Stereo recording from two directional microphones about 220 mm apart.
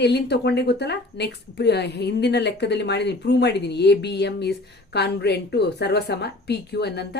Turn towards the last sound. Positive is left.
turn(degrees=50)  # may be behind; listen again after turning